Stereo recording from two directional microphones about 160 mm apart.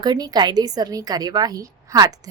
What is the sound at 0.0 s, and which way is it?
A woman's voice, 25° right (ahead or behind).